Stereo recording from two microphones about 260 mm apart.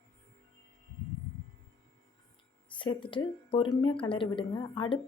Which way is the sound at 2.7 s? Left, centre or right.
Centre.